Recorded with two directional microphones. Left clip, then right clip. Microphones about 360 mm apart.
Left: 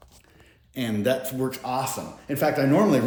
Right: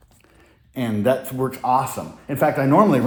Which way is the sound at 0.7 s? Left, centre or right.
Centre.